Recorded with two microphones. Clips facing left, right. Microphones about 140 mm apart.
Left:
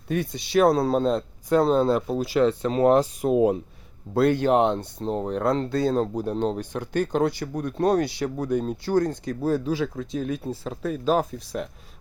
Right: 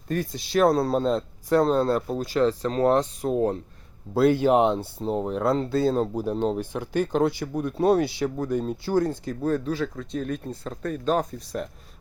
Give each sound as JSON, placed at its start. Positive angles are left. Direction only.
{"t": 0.1, "sound": "speech", "side_deg": 0}
{"t": 4.1, "sound": "speech", "side_deg": -5}
{"t": 9.4, "sound": "speech", "side_deg": 10}